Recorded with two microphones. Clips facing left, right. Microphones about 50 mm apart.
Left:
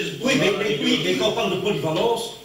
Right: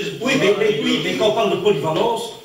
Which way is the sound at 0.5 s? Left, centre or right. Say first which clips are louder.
Right 4 dB; centre.